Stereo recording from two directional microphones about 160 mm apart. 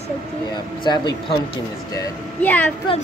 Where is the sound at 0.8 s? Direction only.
25° left (ahead or behind).